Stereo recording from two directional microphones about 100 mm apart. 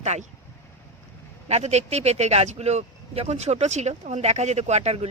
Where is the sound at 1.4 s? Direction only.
90° right.